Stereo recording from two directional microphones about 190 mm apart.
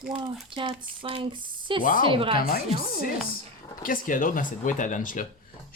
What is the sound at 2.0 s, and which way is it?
Speech, 30° right (ahead or behind).